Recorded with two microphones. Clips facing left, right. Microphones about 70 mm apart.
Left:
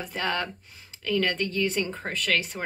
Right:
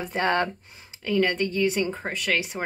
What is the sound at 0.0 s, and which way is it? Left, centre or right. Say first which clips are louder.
Speech: right 5 dB; right.